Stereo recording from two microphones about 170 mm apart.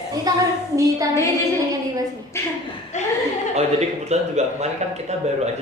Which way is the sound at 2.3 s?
15° left (ahead or behind).